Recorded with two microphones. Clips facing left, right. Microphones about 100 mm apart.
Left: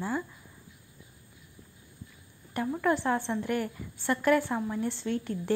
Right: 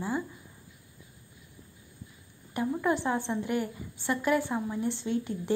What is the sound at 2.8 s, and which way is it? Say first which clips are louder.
Speech: left 3 dB; 15° right (ahead or behind).